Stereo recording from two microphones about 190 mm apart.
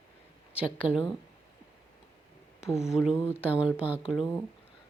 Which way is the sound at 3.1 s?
10° left (ahead or behind).